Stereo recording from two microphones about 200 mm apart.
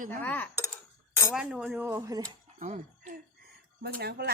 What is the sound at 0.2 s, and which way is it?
Dishes, 10° left (ahead or behind).